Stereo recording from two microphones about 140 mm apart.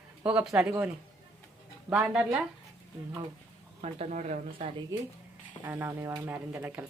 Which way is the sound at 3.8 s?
55° right (ahead or behind).